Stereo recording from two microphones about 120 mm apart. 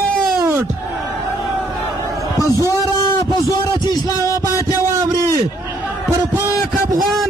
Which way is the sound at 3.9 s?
25° left (ahead or behind).